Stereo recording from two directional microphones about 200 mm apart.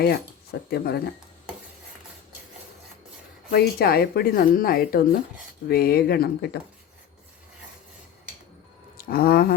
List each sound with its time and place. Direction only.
0.7 s speech: 50° left (ahead or behind)
3.5 s speech: 50° left (ahead or behind)
9.0 s speech: 50° left (ahead or behind)